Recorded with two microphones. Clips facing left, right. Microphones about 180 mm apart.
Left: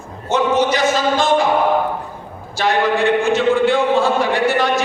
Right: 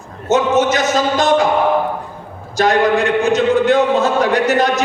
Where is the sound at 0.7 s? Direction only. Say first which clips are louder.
Right 1 dB; 40° right (ahead or behind).